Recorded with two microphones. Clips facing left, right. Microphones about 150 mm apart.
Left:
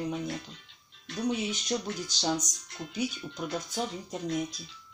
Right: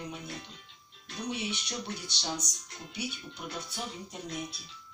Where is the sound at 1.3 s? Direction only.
40° left (ahead or behind).